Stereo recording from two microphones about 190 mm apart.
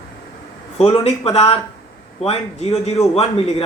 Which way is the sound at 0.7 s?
30° left (ahead or behind).